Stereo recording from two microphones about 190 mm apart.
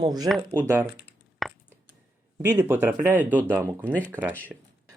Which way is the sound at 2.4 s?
10° right (ahead or behind).